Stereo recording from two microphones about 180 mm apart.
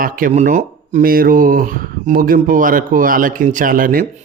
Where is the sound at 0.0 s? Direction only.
45° right (ahead or behind).